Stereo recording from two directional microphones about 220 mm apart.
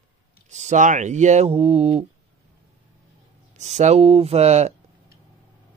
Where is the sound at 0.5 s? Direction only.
30° right (ahead or behind).